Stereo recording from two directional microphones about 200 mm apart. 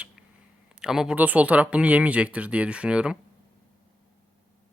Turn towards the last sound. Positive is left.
turn(degrees=-5)  # may be behind; listen again after turning